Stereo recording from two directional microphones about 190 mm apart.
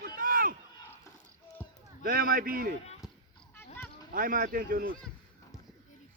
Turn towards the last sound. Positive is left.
turn(degrees=-50)  # may be behind; listen again after turning